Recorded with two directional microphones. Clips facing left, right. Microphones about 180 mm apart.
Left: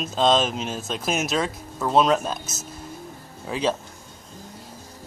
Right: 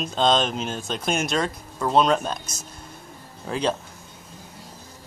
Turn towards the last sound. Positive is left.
turn(degrees=0)  # may be behind; listen again after turning